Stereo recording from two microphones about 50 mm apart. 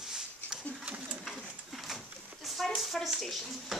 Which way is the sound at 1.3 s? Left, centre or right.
Centre.